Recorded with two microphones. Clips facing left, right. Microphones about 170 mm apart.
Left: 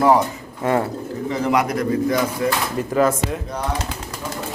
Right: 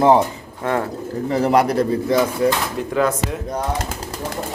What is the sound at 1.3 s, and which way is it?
Speech, 35° right (ahead or behind).